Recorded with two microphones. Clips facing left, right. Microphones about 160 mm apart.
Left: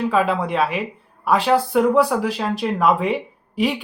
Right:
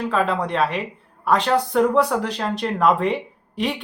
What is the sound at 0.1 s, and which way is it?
A woman's voice, 5° left (ahead or behind).